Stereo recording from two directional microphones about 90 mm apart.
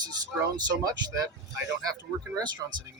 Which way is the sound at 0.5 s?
45° right (ahead or behind).